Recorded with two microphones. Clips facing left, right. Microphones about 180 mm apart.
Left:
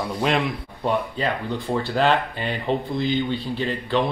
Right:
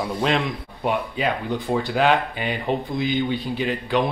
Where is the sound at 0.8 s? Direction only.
15° right (ahead or behind).